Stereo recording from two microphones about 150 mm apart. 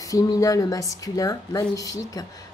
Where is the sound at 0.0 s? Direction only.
25° left (ahead or behind).